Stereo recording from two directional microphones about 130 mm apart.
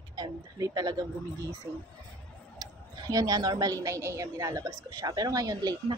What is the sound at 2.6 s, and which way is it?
A woman's voice, 25° right (ahead or behind).